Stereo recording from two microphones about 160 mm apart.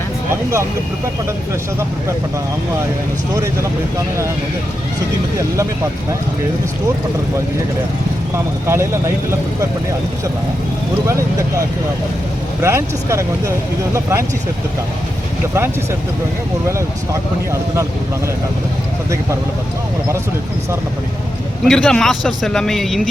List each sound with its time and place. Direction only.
3.3 s speech: 20° right (ahead or behind)
8.6 s speech: 15° right (ahead or behind)
12.6 s speech: 15° right (ahead or behind)
21.6 s a man's voice: 5° left (ahead or behind)